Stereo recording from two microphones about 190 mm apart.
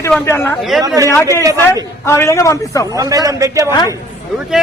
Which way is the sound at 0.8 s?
15° right (ahead or behind).